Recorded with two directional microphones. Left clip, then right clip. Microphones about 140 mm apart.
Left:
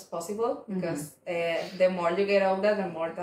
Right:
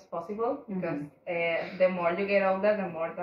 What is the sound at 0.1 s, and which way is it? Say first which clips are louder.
Speech: left 1 dB; 25° left (ahead or behind).